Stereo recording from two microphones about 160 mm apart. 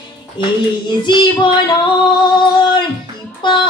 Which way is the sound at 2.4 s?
30° left (ahead or behind).